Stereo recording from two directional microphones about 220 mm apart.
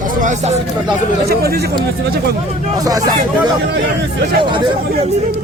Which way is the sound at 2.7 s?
15° right (ahead or behind).